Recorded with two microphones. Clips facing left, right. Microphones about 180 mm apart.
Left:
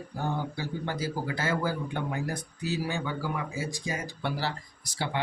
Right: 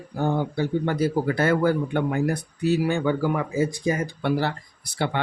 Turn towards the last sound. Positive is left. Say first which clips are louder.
# right 6 dB
turn(degrees=-60)  # may be behind; listen again after turning